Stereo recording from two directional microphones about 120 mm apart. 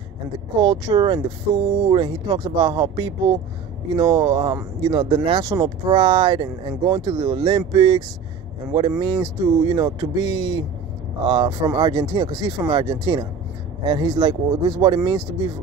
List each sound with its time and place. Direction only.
0.6 s speech: 35° right (ahead or behind)
9.0 s speech: 35° right (ahead or behind)